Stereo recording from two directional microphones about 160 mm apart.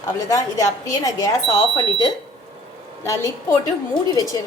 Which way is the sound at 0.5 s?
20° left (ahead or behind).